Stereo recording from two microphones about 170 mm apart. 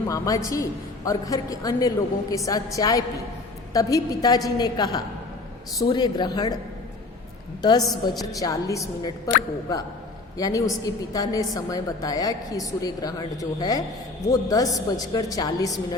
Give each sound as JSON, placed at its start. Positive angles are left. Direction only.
{"t": 0.1, "sound": "a woman's voice", "side_deg": 20}
{"t": 7.6, "sound": "a woman's voice", "side_deg": 25}
{"t": 10.3, "sound": "a woman's voice", "side_deg": 20}